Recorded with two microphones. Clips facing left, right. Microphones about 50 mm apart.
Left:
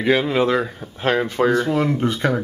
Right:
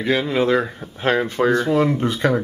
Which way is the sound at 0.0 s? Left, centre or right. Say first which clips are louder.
Left 1 dB; centre.